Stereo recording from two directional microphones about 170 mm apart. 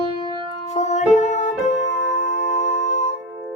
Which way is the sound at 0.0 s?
30° left (ahead or behind).